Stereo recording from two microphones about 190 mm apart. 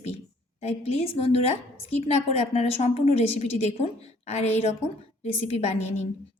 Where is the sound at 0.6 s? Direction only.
35° left (ahead or behind).